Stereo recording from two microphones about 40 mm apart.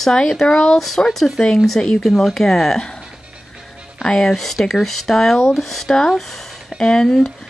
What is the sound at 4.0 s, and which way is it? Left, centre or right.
Speech, centre.